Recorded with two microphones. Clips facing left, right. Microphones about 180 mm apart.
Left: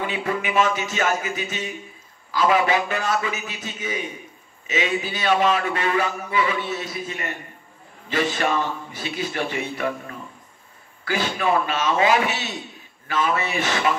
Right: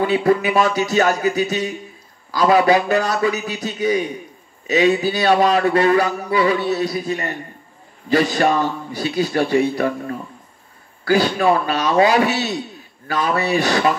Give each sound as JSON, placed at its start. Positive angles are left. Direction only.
{"t": 0.0, "sound": "speech", "side_deg": -40}